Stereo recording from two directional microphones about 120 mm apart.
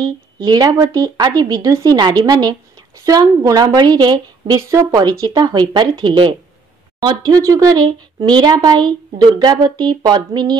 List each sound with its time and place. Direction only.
0.0 s speech: 35° right (ahead or behind)